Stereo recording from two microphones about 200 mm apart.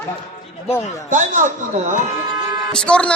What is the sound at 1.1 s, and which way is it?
Speech, 40° right (ahead or behind).